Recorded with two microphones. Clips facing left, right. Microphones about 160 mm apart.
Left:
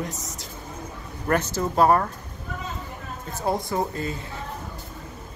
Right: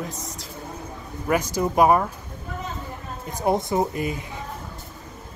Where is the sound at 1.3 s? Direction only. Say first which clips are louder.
Right 1 dB; 10° right (ahead or behind).